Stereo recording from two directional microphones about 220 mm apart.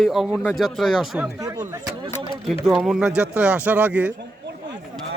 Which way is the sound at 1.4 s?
15° right (ahead or behind).